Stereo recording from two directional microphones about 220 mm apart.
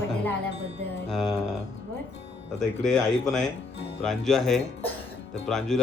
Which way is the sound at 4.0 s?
Centre (ahead or behind).